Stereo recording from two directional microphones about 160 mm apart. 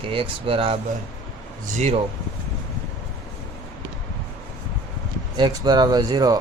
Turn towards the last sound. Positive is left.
turn(degrees=-25)  # may be behind; listen again after turning